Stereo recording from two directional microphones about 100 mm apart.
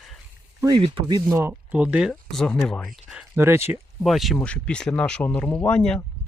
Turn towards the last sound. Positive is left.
turn(degrees=10)  # may be behind; listen again after turning